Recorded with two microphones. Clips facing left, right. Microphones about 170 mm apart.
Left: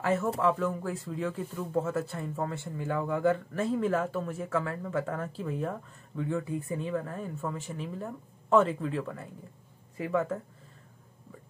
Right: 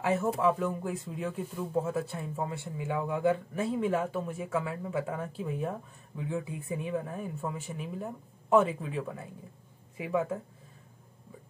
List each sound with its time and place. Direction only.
0.0 s speech: 10° right (ahead or behind)